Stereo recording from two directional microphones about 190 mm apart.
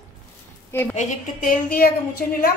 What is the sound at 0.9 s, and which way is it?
A woman's voice, 40° left (ahead or behind).